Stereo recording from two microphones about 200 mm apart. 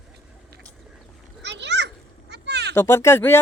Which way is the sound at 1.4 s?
60° right (ahead or behind).